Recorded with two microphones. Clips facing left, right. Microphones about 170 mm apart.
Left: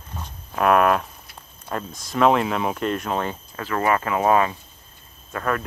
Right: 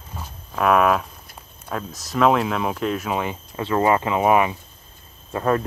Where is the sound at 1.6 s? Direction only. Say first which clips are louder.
Even; centre (ahead or behind).